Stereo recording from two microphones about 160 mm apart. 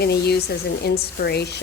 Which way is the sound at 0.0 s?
85° left.